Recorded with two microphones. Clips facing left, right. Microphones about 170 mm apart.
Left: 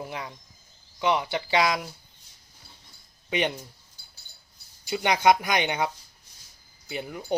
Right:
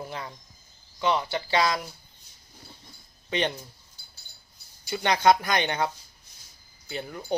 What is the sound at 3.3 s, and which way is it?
Speech, 15° left (ahead or behind).